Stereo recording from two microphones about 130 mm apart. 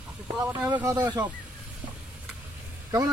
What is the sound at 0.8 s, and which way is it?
Speech, 20° right (ahead or behind).